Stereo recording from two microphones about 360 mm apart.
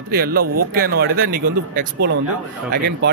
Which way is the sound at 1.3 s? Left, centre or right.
Right.